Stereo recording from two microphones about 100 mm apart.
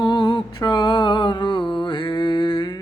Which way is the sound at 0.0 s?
50° left (ahead or behind).